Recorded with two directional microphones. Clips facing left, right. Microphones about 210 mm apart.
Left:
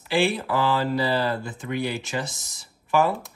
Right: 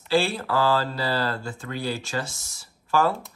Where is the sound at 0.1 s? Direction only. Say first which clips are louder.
Even; 15° left (ahead or behind).